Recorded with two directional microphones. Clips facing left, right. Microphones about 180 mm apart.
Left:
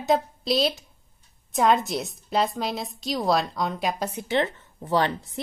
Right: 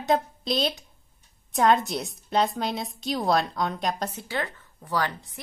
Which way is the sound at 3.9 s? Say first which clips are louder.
Left 5 dB; 10° left (ahead or behind).